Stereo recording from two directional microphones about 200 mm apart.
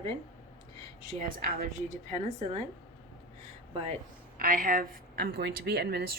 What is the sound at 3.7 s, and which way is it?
Speech, 30° right (ahead or behind).